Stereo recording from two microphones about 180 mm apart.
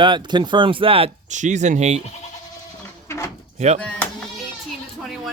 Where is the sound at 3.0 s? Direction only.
15° left (ahead or behind).